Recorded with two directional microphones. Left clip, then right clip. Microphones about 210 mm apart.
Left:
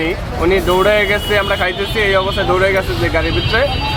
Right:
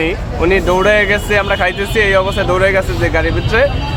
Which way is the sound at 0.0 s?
25° right (ahead or behind).